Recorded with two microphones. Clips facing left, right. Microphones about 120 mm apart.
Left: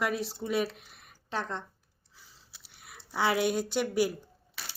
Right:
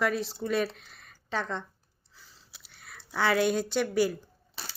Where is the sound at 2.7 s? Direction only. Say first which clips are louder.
Right 1 dB; 10° left (ahead or behind).